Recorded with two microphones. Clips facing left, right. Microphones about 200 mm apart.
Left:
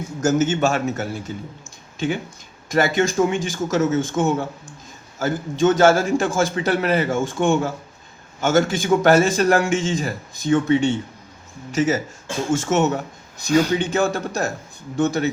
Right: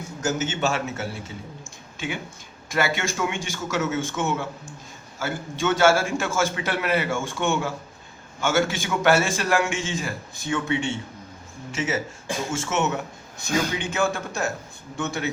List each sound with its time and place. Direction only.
0.2 s a man's voice: 45° left (ahead or behind)
2.7 s a man's voice: 40° left (ahead or behind)